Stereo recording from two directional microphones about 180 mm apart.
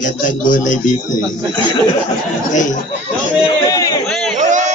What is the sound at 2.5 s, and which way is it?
Speech, 45° left (ahead or behind).